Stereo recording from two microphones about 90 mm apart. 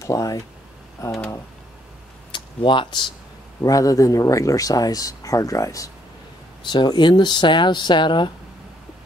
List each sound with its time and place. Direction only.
0.0 s speech: 40° left (ahead or behind)
2.3 s speech: 65° left (ahead or behind)
3.6 s speech: 40° left (ahead or behind)
6.7 s speech: 55° left (ahead or behind)